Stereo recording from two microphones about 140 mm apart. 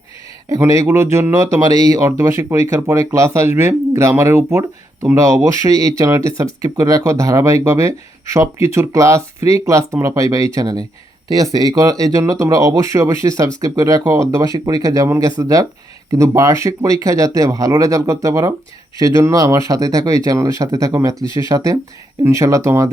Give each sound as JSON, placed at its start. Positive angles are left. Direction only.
{"t": 0.4, "sound": "speech", "side_deg": -20}